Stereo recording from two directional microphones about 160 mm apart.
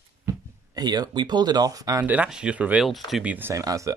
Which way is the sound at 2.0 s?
5° right (ahead or behind).